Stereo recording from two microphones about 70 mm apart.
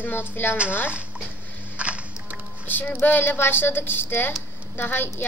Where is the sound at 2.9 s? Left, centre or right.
Left.